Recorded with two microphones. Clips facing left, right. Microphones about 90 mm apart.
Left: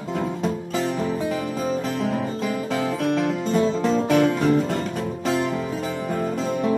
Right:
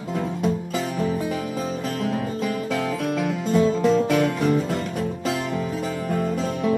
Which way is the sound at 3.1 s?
30° left (ahead or behind).